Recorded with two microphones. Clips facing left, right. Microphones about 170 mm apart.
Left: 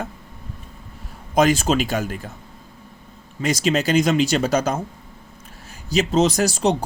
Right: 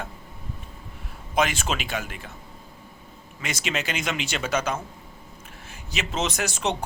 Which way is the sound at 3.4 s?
35° left (ahead or behind).